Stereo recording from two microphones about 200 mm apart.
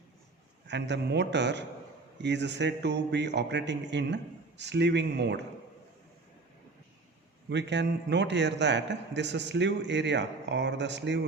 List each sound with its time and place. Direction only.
0.7 s a man's voice: 60° right (ahead or behind)
7.5 s a man's voice: 60° right (ahead or behind)